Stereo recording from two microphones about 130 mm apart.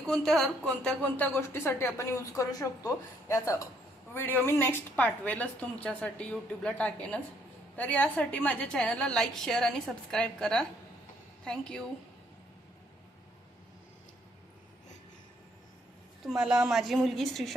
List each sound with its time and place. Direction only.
0.0 s a woman's voice: 5° left (ahead or behind)
16.4 s speech: 5° right (ahead or behind)